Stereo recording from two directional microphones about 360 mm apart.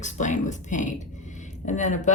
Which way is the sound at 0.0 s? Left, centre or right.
Centre.